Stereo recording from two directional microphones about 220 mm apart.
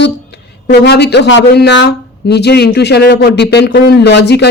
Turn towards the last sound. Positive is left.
turn(degrees=50)  # may be behind; listen again after turning